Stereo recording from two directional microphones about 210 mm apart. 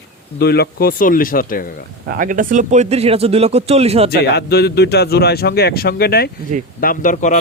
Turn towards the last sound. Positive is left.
turn(degrees=35)  # may be behind; listen again after turning